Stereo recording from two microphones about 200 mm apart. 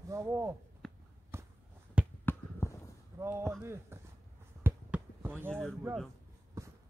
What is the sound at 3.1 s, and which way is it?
Speech, 15° right (ahead or behind).